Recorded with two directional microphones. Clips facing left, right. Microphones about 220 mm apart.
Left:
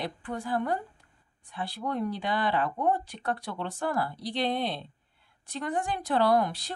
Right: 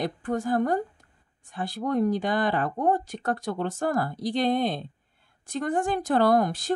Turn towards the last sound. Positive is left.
turn(degrees=-45)  # may be behind; listen again after turning